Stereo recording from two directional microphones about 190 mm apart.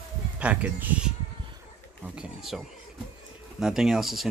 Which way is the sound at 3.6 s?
Centre (ahead or behind).